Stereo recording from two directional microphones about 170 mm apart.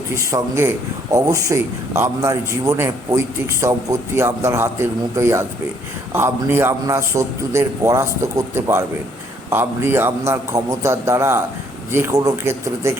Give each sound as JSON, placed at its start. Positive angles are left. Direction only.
{"t": 0.2, "sound": "a man's voice", "side_deg": -15}